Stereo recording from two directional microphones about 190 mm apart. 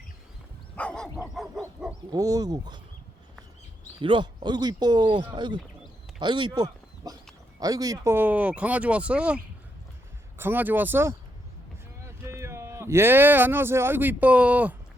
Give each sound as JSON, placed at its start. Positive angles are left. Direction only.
{"t": 0.8, "sound": "dog", "side_deg": 5}
{"t": 2.1, "sound": "speech", "side_deg": -20}
{"t": 4.0, "sound": "speech", "side_deg": -25}